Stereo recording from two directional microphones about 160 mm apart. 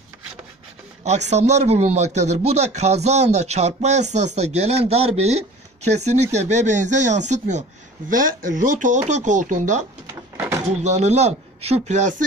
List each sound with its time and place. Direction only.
1.0 s speech: 45° right (ahead or behind)
8.1 s speech: 55° right (ahead or behind)
10.3 s door: 15° right (ahead or behind)
10.8 s speech: 45° right (ahead or behind)